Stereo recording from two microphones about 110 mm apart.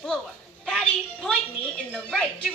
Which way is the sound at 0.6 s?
5° left (ahead or behind).